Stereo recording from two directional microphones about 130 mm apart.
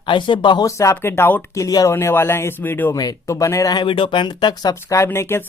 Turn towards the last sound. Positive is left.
turn(degrees=20)  # may be behind; listen again after turning